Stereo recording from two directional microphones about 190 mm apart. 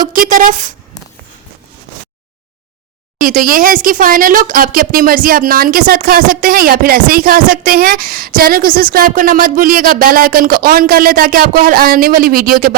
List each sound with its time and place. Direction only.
0.1 s speech: 45° right (ahead or behind)
3.2 s speech: 45° right (ahead or behind)